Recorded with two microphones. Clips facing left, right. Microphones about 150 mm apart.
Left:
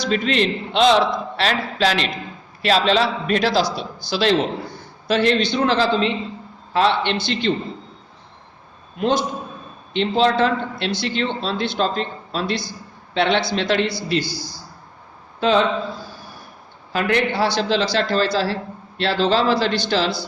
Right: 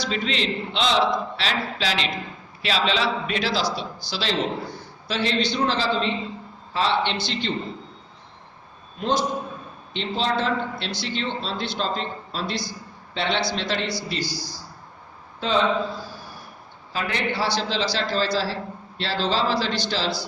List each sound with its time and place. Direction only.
0.1 s a man's voice: 55° left (ahead or behind)
9.0 s a man's voice: 60° left (ahead or behind)
16.9 s a man's voice: 60° left (ahead or behind)